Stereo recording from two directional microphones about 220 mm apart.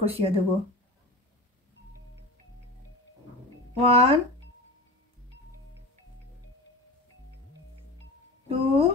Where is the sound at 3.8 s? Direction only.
30° right (ahead or behind).